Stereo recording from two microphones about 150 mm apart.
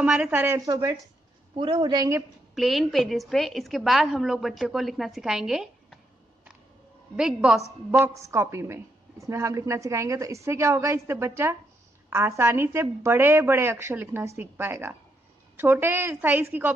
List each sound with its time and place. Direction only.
0.0 s a woman's voice: 10° right (ahead or behind)
0.7 s a woman's voice: 25° right (ahead or behind)
2.5 s a woman's voice: centre (ahead or behind)
7.2 s a woman's voice: 5° right (ahead or behind)
8.1 s a woman's voice: 20° right (ahead or behind)